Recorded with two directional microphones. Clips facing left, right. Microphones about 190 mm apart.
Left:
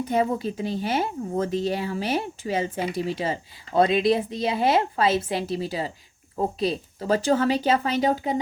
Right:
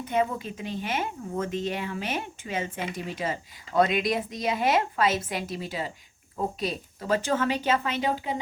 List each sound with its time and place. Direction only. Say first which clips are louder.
0.0 s speech: left 4 dB; 35° left (ahead or behind)